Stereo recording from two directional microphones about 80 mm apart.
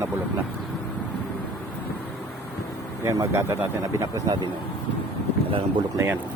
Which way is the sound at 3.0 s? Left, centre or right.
Right.